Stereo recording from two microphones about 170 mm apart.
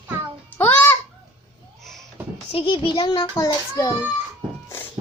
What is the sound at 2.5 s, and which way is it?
A child's voice, 30° left (ahead or behind).